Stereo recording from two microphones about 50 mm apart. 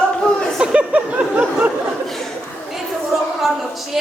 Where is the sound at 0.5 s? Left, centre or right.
Centre.